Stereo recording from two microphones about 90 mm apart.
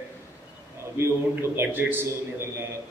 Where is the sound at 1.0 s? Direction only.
30° right (ahead or behind).